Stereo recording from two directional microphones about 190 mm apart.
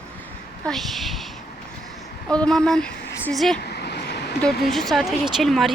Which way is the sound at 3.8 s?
60° left (ahead or behind).